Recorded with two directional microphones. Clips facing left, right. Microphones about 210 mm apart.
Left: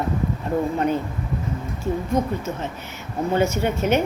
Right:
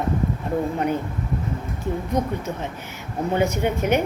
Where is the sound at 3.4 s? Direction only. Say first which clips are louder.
Even; 15° right (ahead or behind).